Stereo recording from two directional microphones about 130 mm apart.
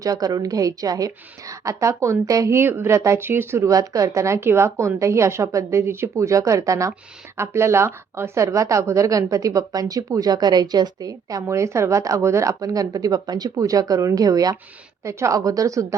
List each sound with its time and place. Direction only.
0.0 s a woman's voice: 30° right (ahead or behind)